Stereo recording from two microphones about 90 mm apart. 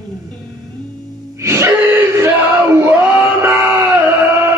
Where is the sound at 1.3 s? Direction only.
30° right (ahead or behind).